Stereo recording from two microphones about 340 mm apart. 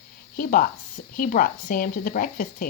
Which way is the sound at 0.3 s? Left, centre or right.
Left.